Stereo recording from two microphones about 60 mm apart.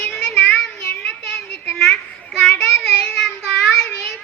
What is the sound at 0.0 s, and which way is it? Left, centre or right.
Child singing, centre.